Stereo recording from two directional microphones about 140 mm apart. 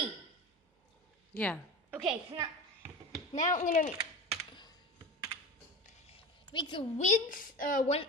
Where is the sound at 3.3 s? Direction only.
65° left (ahead or behind).